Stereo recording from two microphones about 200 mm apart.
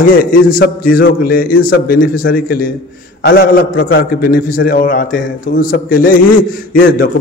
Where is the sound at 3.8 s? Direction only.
75° left (ahead or behind).